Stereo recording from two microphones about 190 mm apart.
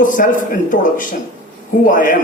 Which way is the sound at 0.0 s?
45° left (ahead or behind).